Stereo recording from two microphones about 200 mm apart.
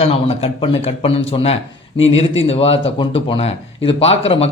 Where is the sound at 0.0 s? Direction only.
30° left (ahead or behind).